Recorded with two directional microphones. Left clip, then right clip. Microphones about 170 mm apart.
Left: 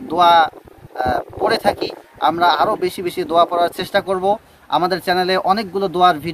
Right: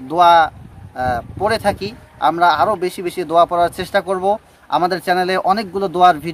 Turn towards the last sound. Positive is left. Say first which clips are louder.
# right 2 dB
turn(degrees=-10)  # may be behind; listen again after turning